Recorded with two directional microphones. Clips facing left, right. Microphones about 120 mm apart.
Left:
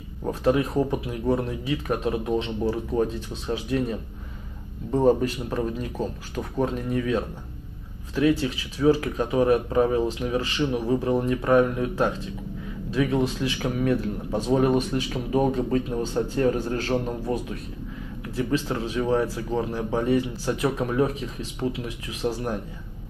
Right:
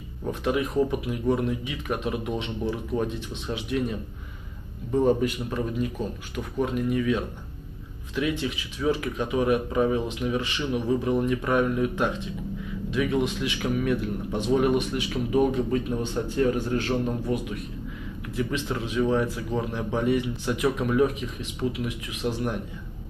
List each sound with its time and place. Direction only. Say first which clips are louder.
0.2 s speech: left 4 dB; 35° left (ahead or behind)
4.9 s speech: left 2 dB; 40° left (ahead or behind)